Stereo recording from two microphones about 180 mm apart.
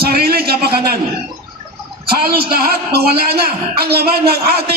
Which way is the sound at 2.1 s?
60° right (ahead or behind).